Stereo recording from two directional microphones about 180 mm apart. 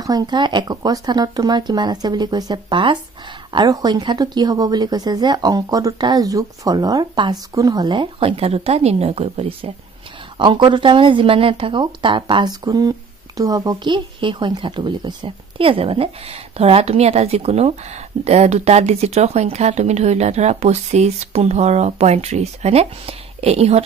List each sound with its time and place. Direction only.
0.0 s speech: 20° right (ahead or behind)